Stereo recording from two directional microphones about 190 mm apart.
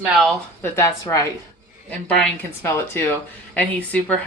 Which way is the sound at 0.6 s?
15° left (ahead or behind).